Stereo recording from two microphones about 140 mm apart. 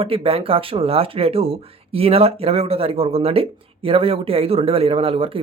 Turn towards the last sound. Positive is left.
turn(degrees=-40)  # may be behind; listen again after turning